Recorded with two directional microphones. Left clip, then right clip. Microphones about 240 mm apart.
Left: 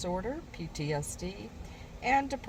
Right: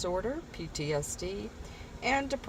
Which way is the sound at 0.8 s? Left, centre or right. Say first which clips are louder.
Right 2 dB; right.